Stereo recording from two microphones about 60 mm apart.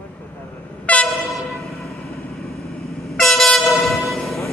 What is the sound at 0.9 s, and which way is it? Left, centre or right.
Train, left.